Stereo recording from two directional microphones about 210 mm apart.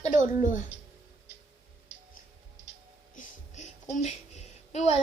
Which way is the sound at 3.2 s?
35° left (ahead or behind).